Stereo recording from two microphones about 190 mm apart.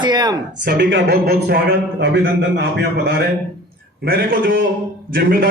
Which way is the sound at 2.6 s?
60° right (ahead or behind).